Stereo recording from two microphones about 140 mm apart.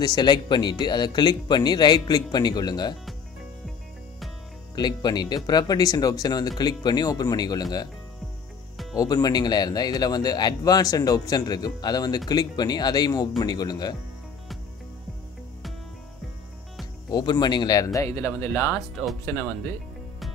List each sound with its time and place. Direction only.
0.0 s speech: 30° left (ahead or behind)
4.7 s speech: 30° left (ahead or behind)
8.9 s speech: 25° left (ahead or behind)
17.1 s speech: 30° left (ahead or behind)